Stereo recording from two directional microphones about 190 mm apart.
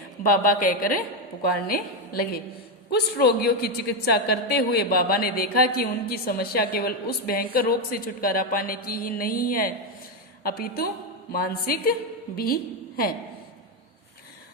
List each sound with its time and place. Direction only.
0.2 s a man's voice: 45° left (ahead or behind)
2.9 s a man's voice: 60° left (ahead or behind)